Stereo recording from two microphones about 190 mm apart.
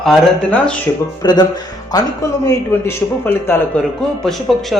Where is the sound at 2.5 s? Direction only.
10° left (ahead or behind).